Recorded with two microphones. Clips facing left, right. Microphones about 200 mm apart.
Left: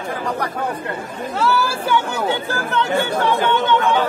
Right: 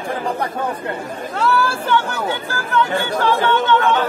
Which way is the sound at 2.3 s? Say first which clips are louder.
Left 2 dB; 25° left (ahead or behind).